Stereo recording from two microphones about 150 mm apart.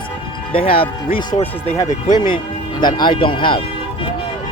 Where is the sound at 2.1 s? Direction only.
60° left (ahead or behind).